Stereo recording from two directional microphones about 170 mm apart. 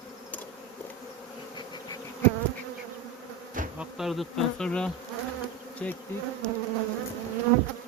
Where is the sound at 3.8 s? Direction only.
Centre (ahead or behind).